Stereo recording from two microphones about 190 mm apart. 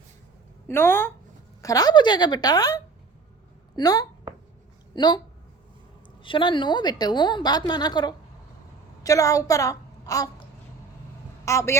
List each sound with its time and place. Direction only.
0.7 s a woman's voice: 10° left (ahead or behind)
6.2 s a woman's voice: 25° left (ahead or behind)
11.4 s speech: 15° left (ahead or behind)